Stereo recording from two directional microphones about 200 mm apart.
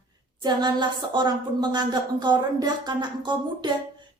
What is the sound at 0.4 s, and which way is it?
A woman's voice, 20° right (ahead or behind).